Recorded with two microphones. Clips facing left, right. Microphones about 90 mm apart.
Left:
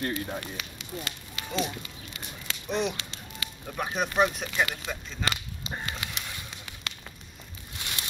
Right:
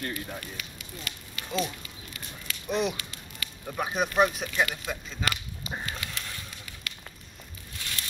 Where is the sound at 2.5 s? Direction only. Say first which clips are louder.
Right 1 dB; 25° left (ahead or behind).